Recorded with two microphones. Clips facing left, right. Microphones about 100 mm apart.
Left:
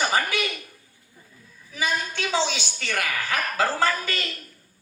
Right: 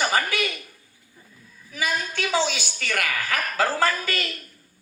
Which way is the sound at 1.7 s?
20° left (ahead or behind).